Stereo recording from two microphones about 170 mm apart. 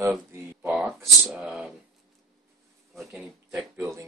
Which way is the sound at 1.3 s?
5° right (ahead or behind).